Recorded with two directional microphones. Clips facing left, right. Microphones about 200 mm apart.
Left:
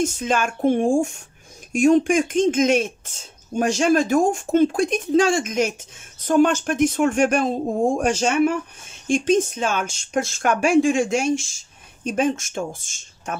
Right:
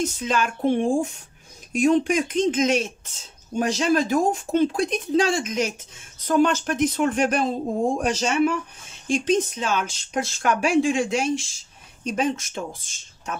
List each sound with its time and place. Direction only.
0.0 s speech: 50° left (ahead or behind)